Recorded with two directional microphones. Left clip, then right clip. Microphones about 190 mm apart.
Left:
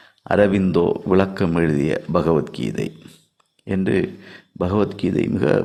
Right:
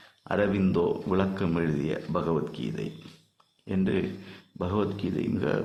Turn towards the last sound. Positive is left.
turn(degrees=35)  # may be behind; listen again after turning